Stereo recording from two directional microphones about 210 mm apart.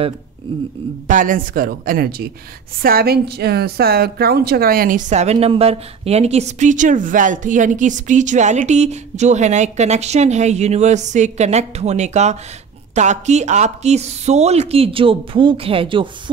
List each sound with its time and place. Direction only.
1.0 s a man's voice: 40° right (ahead or behind)